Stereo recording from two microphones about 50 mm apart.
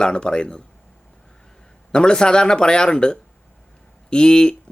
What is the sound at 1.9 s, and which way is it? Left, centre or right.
Speech, centre.